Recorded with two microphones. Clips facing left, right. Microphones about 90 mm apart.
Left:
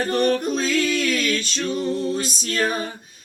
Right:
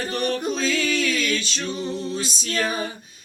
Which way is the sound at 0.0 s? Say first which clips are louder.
Left 5 dB; 55° left (ahead or behind).